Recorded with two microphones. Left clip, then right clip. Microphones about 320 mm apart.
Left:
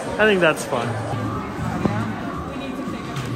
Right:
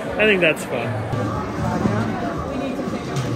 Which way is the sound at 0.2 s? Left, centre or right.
Left.